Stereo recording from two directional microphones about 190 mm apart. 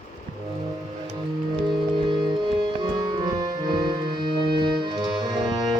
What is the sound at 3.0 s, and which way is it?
Music, 20° right (ahead or behind).